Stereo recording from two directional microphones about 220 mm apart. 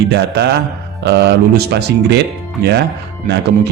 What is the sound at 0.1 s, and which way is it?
Speech, 50° right (ahead or behind).